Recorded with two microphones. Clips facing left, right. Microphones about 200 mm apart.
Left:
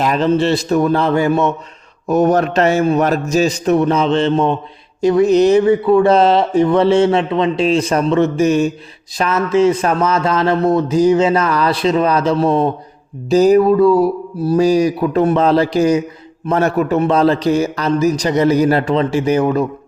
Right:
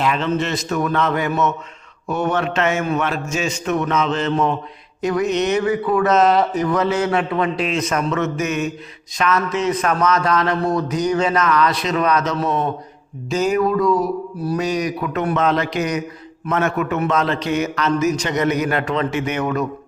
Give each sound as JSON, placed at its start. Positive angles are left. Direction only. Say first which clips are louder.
{"t": 0.0, "sound": "a man's voice", "louder": "left 6 dB", "side_deg": 40}